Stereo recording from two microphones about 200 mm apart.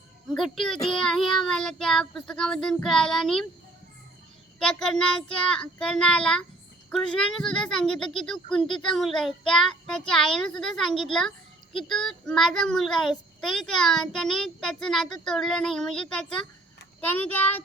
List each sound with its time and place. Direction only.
0.3 s a child's voice: centre (ahead or behind)
4.6 s a child's voice: 5° left (ahead or behind)